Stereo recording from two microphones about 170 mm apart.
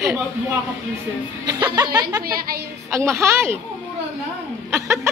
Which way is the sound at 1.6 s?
25° right (ahead or behind).